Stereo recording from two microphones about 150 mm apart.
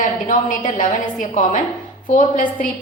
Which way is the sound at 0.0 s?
55° left (ahead or behind).